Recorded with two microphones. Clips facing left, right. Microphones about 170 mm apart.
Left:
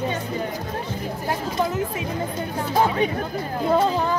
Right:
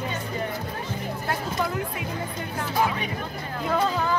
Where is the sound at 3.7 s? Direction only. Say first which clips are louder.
Left 4 dB; 30° left (ahead or behind).